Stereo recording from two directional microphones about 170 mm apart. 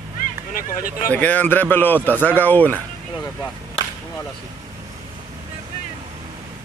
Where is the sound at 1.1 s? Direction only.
10° left (ahead or behind).